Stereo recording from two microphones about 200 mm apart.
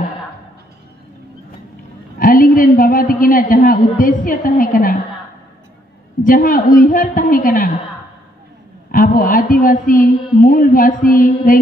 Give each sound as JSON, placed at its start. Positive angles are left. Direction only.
{"t": 2.1, "sound": "a man's voice", "side_deg": 45}
{"t": 6.2, "sound": "a man's voice", "side_deg": 40}
{"t": 8.9, "sound": "a man's voice", "side_deg": 45}